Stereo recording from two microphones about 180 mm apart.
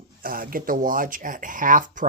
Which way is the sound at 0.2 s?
50° right (ahead or behind).